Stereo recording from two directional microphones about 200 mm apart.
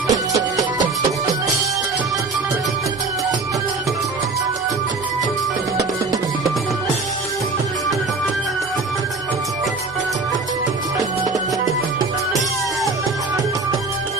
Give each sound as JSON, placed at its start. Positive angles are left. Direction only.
{"t": 0.1, "sound": "music", "side_deg": -15}